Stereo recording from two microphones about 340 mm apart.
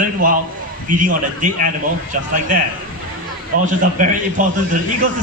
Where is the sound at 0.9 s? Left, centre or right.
Right.